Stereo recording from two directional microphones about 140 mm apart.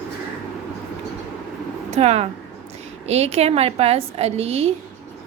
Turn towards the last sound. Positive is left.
turn(degrees=-45)  # may be behind; listen again after turning